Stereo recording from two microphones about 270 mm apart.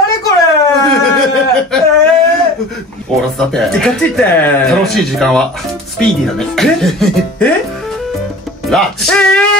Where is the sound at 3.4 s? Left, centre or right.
Centre.